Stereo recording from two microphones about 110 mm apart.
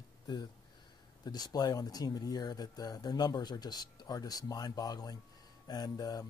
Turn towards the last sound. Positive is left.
turn(degrees=35)  # may be behind; listen again after turning